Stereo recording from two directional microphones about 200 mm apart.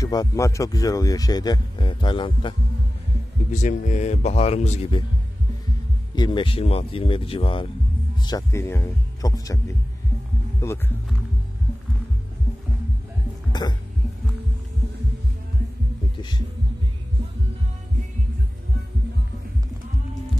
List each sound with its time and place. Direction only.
0.0 s speech: 15° left (ahead or behind)
3.6 s speech: 35° left (ahead or behind)
6.1 s speech: 25° left (ahead or behind)
13.5 s cough: 20° left (ahead or behind)
16.2 s speech: 20° left (ahead or behind)